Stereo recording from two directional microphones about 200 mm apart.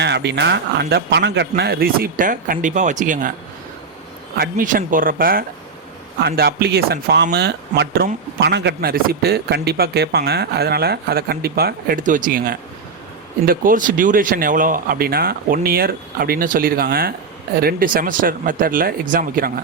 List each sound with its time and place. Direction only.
0.0 s speech: 60° right (ahead or behind); by 3.3 s 40° right (ahead or behind)
4.4 s speech: 45° right (ahead or behind)